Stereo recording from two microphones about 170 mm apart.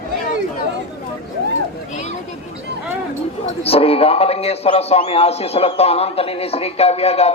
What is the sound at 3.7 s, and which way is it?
A man's voice, 35° left (ahead or behind).